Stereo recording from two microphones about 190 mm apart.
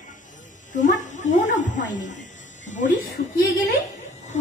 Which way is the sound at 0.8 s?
40° left (ahead or behind).